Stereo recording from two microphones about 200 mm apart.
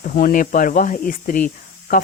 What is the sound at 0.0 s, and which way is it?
Speech, 40° left (ahead or behind).